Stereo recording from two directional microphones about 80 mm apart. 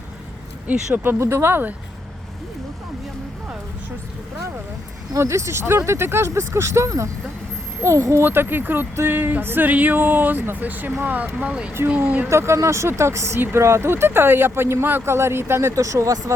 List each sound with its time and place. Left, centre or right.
0.7 s speech: right
5.1 s speech: right
8.2 s speech: right
12.3 s speech: right